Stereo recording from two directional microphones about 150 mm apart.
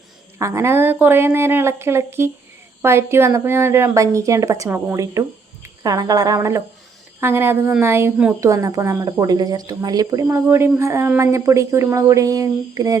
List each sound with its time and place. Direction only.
0.3 s a woman's voice: 20° right (ahead or behind)